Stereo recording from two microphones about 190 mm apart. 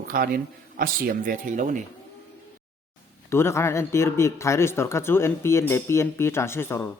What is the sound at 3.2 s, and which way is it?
Speech, 15° left (ahead or behind).